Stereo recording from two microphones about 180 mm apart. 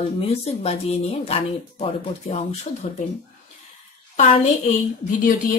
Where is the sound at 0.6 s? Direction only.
35° left (ahead or behind).